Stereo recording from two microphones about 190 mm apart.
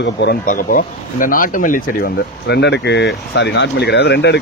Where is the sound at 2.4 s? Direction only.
65° left (ahead or behind).